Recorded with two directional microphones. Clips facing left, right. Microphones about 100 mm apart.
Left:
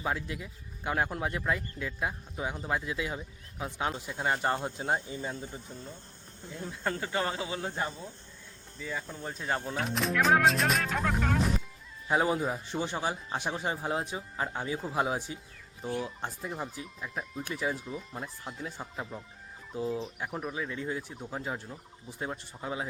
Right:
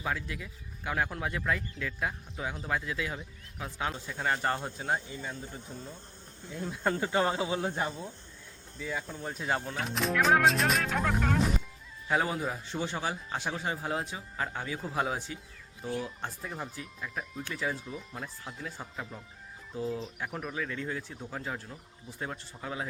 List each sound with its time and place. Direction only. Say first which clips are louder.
0.0 s speech: left 1 dB; 25° left (ahead or behind)
6.7 s speech: right 3 dB; 10° right (ahead or behind)
7.7 s speech: right 1 dB; 10° right (ahead or behind)
12.0 s speech: left 2 dB; 20° left (ahead or behind)